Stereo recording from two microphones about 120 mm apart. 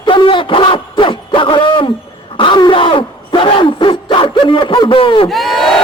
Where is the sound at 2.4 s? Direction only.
45° left (ahead or behind).